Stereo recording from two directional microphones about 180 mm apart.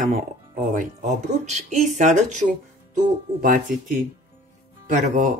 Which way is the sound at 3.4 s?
50° right (ahead or behind).